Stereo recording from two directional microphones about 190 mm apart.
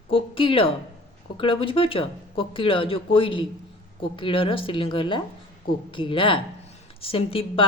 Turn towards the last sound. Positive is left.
turn(degrees=30)  # may be behind; listen again after turning